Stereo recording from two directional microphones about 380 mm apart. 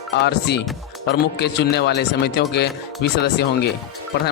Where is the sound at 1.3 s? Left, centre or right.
Left.